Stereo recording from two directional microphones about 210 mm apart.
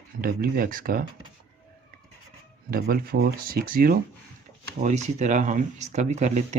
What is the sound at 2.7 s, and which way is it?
Speech, 45° right (ahead or behind).